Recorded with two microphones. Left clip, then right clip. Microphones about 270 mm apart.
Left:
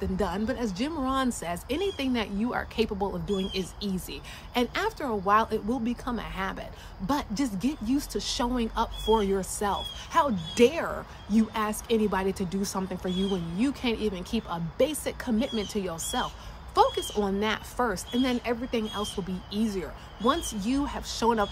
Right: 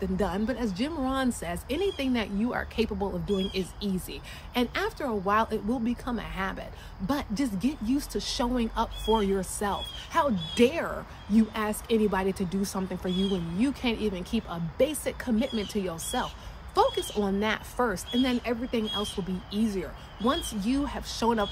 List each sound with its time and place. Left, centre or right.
0.0 s a woman's voice: centre